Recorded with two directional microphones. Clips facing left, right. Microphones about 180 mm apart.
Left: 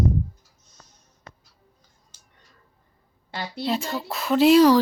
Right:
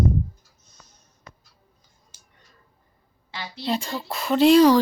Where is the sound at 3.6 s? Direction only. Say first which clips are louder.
Even; centre (ahead or behind).